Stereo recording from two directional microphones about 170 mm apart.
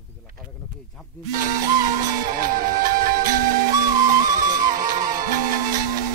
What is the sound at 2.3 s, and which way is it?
Music, 55° right (ahead or behind).